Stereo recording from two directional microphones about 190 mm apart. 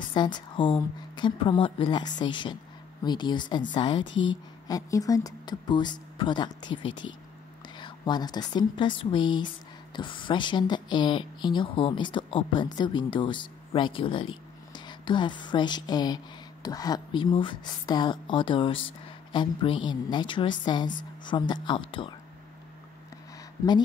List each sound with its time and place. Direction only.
0.1 s speech: 25° left (ahead or behind)
4.0 s speech: 75° left (ahead or behind)
4.6 s a woman's voice: 20° left (ahead or behind)